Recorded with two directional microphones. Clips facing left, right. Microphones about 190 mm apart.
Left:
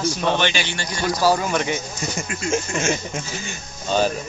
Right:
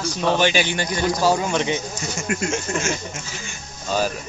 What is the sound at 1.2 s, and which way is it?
Speech, 20° right (ahead or behind).